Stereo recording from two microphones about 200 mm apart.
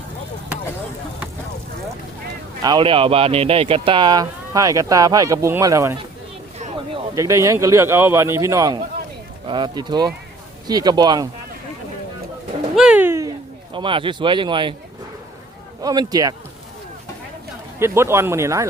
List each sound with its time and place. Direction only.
2.6 s speech: 20° right (ahead or behind)
7.2 s a man's voice: 15° right (ahead or behind)
12.7 s bird: 5° right (ahead or behind)
13.7 s speech: 25° right (ahead or behind)
15.8 s speech: 20° right (ahead or behind)
17.7 s a man's voice: 15° right (ahead or behind)